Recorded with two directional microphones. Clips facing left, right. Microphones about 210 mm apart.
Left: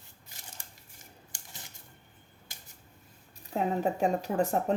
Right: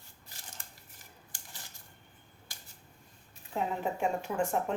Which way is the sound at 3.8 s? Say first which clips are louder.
Left 4 dB; 35° left (ahead or behind).